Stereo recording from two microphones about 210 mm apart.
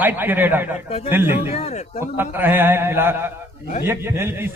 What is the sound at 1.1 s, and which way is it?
Speech, 10° right (ahead or behind).